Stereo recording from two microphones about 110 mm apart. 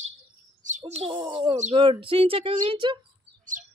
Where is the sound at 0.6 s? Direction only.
90° right.